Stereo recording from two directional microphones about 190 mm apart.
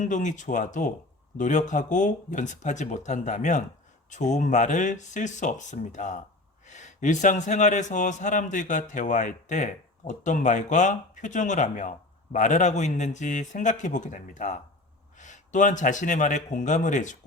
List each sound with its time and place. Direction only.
0.0 s a man's voice: 40° left (ahead or behind)